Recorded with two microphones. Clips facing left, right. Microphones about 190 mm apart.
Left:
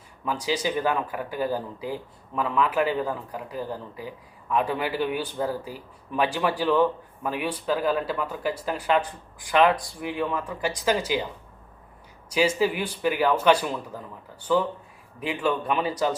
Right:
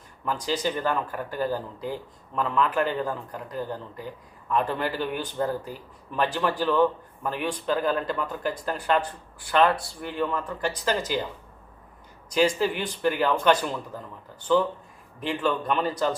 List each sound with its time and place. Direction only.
0.3 s speech: 10° left (ahead or behind)
12.3 s speech: 10° left (ahead or behind)
15.2 s speech: 10° left (ahead or behind)